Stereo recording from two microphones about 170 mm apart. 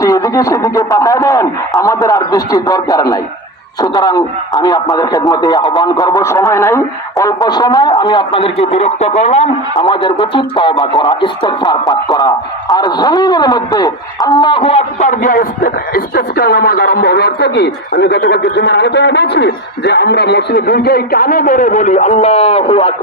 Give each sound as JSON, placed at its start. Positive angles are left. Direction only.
{"t": 0.0, "sound": "a man's voice", "side_deg": 20}
{"t": 9.7, "sound": "a man's voice", "side_deg": 25}
{"t": 14.6, "sound": "a man's voice", "side_deg": 40}